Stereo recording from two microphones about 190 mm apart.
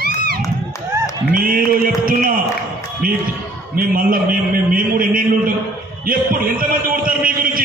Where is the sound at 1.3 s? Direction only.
50° right (ahead or behind).